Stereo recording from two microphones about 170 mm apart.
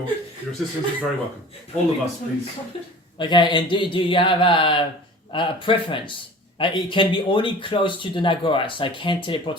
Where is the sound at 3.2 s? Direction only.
25° left (ahead or behind).